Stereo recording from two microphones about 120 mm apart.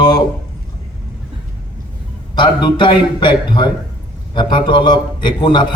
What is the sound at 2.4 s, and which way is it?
A man's voice, 40° left (ahead or behind).